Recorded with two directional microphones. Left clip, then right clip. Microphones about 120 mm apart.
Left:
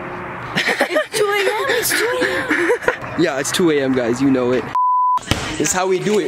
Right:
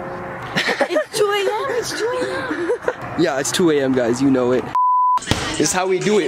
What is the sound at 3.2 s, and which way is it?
Speech, centre (ahead or behind).